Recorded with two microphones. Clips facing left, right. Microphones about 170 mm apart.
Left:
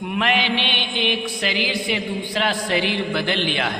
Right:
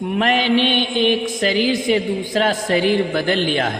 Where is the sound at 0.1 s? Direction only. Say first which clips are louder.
Right 5 dB; 40° right (ahead or behind).